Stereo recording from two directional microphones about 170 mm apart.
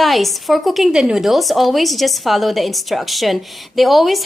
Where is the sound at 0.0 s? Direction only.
Centre (ahead or behind).